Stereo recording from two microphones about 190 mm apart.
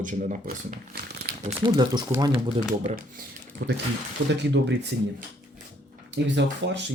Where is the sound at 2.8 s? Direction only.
50° right (ahead or behind).